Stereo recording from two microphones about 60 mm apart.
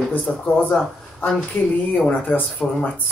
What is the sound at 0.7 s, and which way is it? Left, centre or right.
Speech, centre.